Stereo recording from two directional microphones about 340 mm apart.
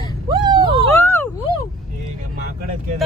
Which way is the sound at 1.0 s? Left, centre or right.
Centre.